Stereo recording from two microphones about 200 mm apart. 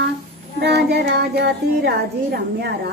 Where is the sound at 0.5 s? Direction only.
55° right (ahead or behind).